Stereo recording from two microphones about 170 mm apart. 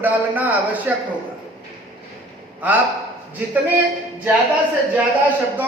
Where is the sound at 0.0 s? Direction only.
10° right (ahead or behind).